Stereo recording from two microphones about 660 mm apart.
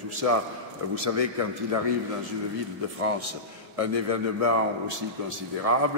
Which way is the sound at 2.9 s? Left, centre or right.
Right.